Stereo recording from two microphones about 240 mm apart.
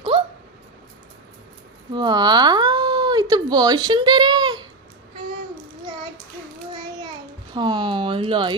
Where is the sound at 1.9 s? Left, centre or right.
Centre.